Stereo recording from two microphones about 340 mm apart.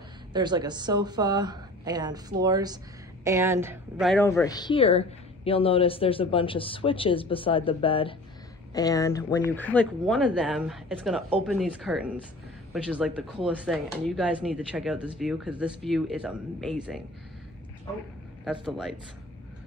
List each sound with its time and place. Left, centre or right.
0.3 s a woman's voice: centre
18.4 s speech: centre